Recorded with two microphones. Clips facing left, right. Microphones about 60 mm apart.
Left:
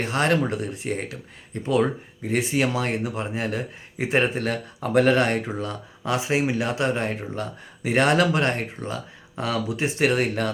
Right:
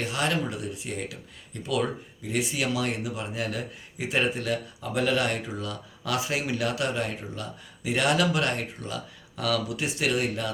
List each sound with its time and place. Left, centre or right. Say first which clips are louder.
0.0 s speech: left 6 dB; left
6.0 s speech: left 5 dB; left